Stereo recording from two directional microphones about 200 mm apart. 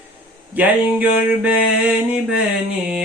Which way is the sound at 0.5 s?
5° right (ahead or behind).